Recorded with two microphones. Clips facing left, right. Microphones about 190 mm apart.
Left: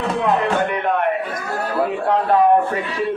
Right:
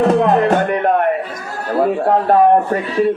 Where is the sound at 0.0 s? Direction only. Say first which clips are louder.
Right 7 dB; 45° right (ahead or behind).